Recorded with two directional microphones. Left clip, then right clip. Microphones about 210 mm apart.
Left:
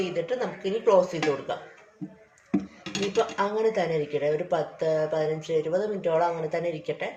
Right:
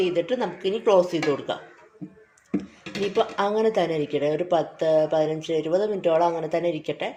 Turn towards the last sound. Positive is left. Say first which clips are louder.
# right 3 dB
turn(degrees=-40)  # may be behind; listen again after turning